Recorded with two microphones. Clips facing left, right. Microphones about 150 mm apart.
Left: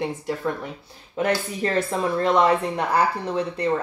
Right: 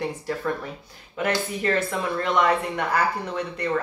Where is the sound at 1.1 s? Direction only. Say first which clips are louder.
Left 2 dB; 35° left (ahead or behind).